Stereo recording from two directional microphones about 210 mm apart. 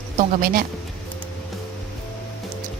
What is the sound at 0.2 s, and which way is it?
Speech, 40° right (ahead or behind).